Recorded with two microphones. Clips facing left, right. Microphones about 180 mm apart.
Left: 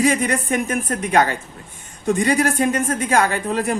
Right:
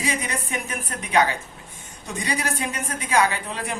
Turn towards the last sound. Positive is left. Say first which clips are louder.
# left 9 dB
turn(degrees=45)  # may be behind; listen again after turning